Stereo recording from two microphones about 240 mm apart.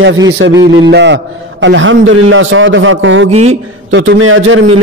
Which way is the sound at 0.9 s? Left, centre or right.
Right.